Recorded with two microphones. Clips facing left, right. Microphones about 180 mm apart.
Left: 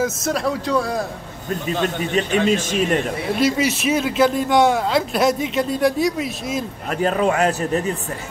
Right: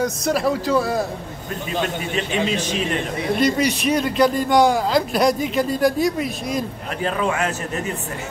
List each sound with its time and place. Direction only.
0.0 s a man's voice: centre (ahead or behind)
2.1 s speech: 45° left (ahead or behind)
3.3 s a man's voice: 5° left (ahead or behind)
6.9 s a man's voice: 40° left (ahead or behind)